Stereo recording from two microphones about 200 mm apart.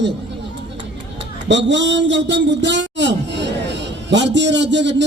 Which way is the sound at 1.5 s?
65° right (ahead or behind).